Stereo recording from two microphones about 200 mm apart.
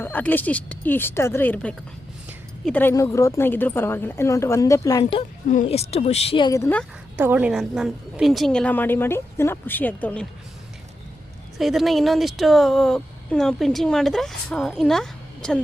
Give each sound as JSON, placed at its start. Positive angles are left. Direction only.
{"t": 0.0, "sound": "a woman's voice", "side_deg": 10}
{"t": 5.6, "sound": "speech", "side_deg": 30}
{"t": 7.2, "sound": "speech", "side_deg": -5}
{"t": 11.5, "sound": "speech", "side_deg": 0}